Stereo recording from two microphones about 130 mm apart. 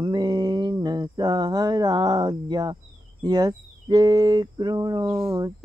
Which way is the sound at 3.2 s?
30° right (ahead or behind).